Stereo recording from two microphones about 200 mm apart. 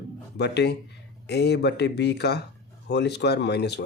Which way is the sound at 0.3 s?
55° left (ahead or behind).